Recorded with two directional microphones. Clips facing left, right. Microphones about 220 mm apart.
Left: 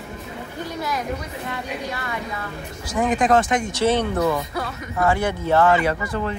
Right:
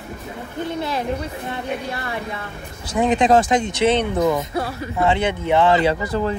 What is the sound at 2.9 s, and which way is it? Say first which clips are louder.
Speech: right 3 dB; 25° right (ahead or behind).